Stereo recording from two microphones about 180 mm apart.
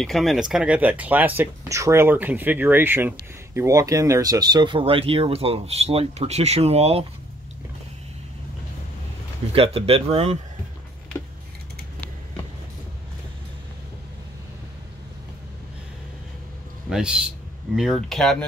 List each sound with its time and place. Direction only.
0.0 s speech: centre (ahead or behind); by 7.1 s 35° right (ahead or behind)
9.5 s speech: 30° right (ahead or behind)
11.1 s computer keyboard: 10° left (ahead or behind)
16.9 s a man's voice: 5° right (ahead or behind)